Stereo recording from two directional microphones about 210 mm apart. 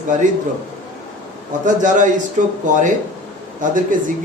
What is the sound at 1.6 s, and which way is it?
A man's voice, 35° right (ahead or behind).